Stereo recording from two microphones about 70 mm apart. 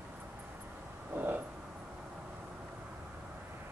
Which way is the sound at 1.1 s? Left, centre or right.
Right.